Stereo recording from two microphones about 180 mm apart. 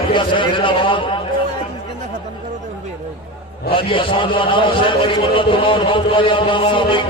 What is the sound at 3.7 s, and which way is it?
A man's voice, 30° left (ahead or behind).